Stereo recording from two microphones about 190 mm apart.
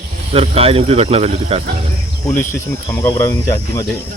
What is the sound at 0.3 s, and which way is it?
Speech, 30° right (ahead or behind).